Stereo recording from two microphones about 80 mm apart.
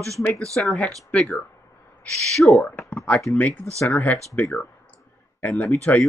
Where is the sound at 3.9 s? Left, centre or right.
Centre.